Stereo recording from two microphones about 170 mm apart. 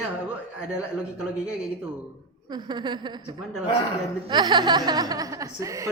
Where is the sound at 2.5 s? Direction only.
25° right (ahead or behind).